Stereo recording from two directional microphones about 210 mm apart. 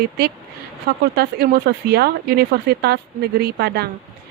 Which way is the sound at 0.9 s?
50° right (ahead or behind).